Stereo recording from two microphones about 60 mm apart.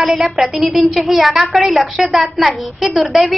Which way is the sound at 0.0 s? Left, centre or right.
Centre.